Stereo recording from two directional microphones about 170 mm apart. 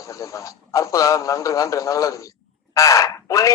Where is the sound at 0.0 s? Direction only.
20° left (ahead or behind).